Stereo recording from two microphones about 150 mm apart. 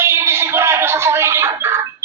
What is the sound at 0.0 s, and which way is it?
Music, 15° right (ahead or behind).